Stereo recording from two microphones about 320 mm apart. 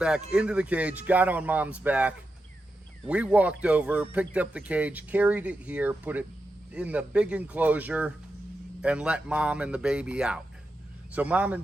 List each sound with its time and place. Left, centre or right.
0.0 s speech: centre